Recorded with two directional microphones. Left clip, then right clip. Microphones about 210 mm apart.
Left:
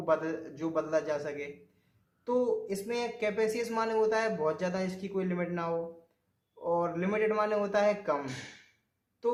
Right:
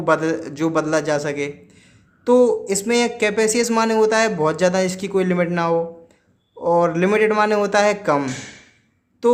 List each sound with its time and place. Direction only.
0.0 s speech: 50° right (ahead or behind)